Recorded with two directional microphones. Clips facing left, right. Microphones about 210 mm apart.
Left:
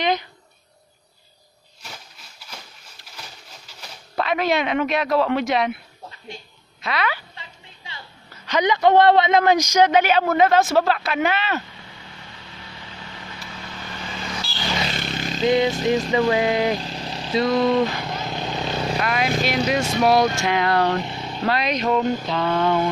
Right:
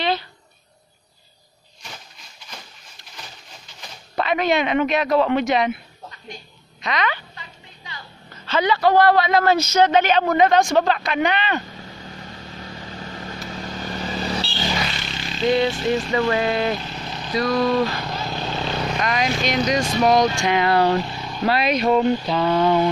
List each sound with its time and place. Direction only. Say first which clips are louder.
0.0 s a sound: left 1 dB; 15° left (ahead or behind)
3.6 s speech: even; centre (ahead or behind)
6.8 s speech: right 1 dB; 5° left (ahead or behind)
7.3 s a sound: right 1 dB; 25° left (ahead or behind)
8.5 s speech: left 1 dB; 15° left (ahead or behind)
11.7 s vehicle: right 6 dB; 40° right (ahead or behind)
15.0 s wild animals: left 4 dB; 50° left (ahead or behind)
15.4 s speech: even; 20° left (ahead or behind)
16.8 s speech: left 1 dB; 30° left (ahead or behind)
17.9 s vehicle: even; 15° left (ahead or behind)
18.9 s speech: left 1 dB; 5° left (ahead or behind)
21.0 s vehicle: right 1 dB; 25° left (ahead or behind)
21.5 s speech: right 3 dB; 10° right (ahead or behind)